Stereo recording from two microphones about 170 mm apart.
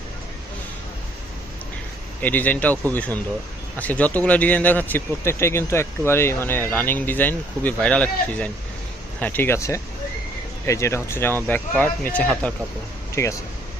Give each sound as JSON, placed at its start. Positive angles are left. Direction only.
{"t": 2.2, "sound": "speech", "side_deg": 10}